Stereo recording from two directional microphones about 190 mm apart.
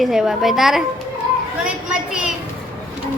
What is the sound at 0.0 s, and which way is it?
Speech, centre (ahead or behind).